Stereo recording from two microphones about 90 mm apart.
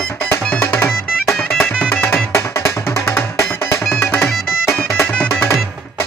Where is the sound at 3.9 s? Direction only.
25° left (ahead or behind).